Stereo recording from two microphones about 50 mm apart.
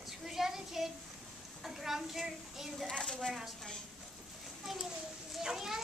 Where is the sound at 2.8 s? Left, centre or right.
Centre.